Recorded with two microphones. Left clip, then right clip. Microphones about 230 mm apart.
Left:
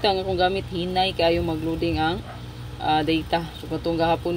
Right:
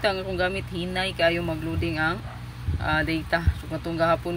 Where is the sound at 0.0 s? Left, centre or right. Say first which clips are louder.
Left 4 dB; right.